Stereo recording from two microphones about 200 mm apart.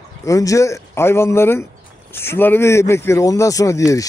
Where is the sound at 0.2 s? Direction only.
15° left (ahead or behind).